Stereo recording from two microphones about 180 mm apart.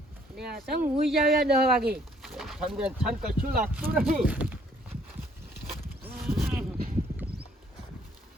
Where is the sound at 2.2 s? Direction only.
Centre (ahead or behind).